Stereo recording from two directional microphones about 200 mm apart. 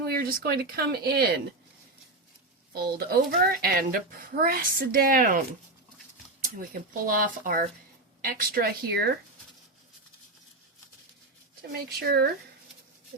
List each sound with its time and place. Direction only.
0.0 s speech: 50° right (ahead or behind)
2.7 s speech: 50° right (ahead or behind)
6.6 s speech: 45° right (ahead or behind)
11.7 s speech: 55° right (ahead or behind)